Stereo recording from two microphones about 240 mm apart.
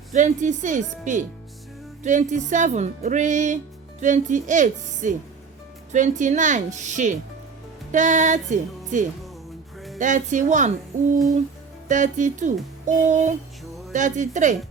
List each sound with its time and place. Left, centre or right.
0.1 s music: right
11.9 s music: right